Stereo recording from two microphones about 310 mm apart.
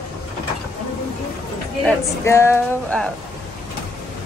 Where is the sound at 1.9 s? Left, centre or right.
Centre.